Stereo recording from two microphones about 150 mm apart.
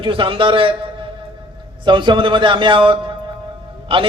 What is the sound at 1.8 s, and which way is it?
A man's voice, 30° right (ahead or behind).